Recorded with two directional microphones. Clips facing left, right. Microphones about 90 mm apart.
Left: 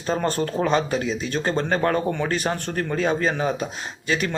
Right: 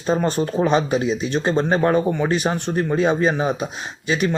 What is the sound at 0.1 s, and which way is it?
Speech, 15° right (ahead or behind).